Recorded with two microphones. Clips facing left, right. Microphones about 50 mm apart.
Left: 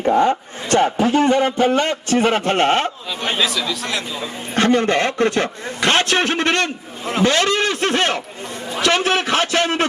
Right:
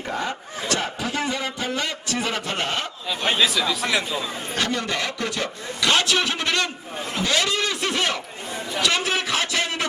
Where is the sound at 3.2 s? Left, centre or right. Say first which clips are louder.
Left 1 dB; centre.